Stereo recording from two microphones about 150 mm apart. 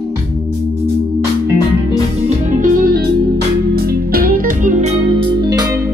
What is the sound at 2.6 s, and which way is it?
Music, 90° right.